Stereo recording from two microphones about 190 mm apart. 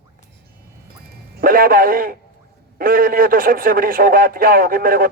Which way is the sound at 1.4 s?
50° right (ahead or behind).